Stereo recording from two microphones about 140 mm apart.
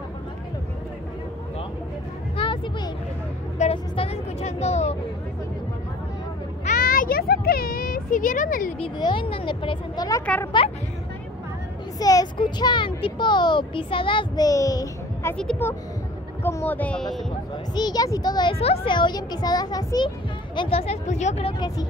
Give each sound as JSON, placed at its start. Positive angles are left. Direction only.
{"t": 2.3, "sound": "a sound", "side_deg": 40}
{"t": 3.7, "sound": "vehicle", "side_deg": 40}
{"t": 6.6, "sound": "a sound", "side_deg": 80}
{"t": 8.7, "sound": "a child's voice", "side_deg": 35}
{"t": 10.2, "sound": "speech", "side_deg": 10}
{"t": 12.0, "sound": "a child's voice", "side_deg": 25}
{"t": 15.3, "sound": "speech", "side_deg": 5}
{"t": 17.7, "sound": "a child's voice", "side_deg": 30}
{"t": 20.5, "sound": "speech", "side_deg": 40}
{"t": 21.5, "sound": "a child's voice", "side_deg": 25}